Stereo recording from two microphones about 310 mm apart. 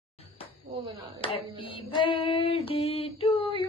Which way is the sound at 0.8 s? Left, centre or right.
Centre.